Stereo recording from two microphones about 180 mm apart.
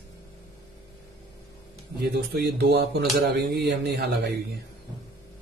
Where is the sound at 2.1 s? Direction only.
65° right (ahead or behind).